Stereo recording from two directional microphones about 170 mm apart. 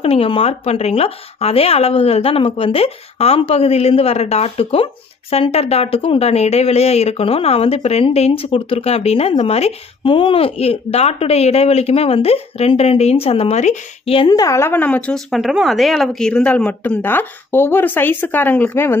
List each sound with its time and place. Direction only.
0.0 s speech: 35° left (ahead or behind); by 18.9 s 10° left (ahead or behind)